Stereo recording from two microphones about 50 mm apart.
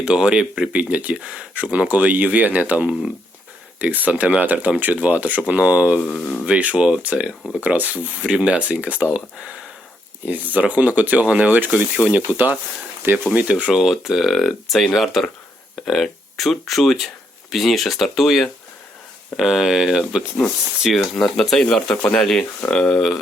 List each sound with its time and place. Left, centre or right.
0.0 s speech: centre
0.7 s speech: right
6.1 s speech: left
6.4 s speech: right
10.2 s speech: right; by 13.8 s centre
13.8 s speech: centre
21.8 s speech: centre